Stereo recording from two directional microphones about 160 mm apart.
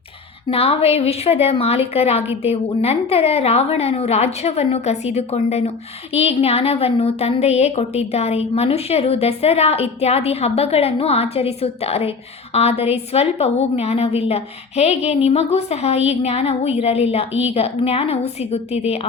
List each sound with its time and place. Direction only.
0.5 s a woman's voice: 35° left (ahead or behind)